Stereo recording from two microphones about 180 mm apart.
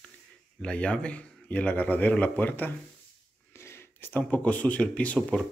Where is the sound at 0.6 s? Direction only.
5° left (ahead or behind).